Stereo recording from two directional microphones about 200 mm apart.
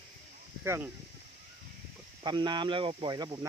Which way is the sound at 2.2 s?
20° right (ahead or behind).